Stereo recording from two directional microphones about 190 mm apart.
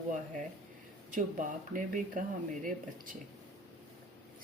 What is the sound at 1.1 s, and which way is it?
Speech, 45° right (ahead or behind).